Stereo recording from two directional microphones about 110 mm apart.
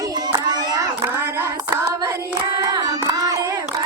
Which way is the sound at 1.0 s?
20° right (ahead or behind).